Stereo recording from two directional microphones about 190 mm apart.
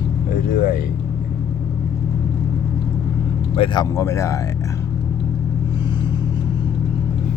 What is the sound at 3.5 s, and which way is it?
Speech, 25° left (ahead or behind).